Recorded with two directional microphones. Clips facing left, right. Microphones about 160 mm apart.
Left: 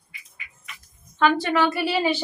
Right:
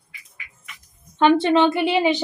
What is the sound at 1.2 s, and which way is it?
A woman's voice, 25° right (ahead or behind).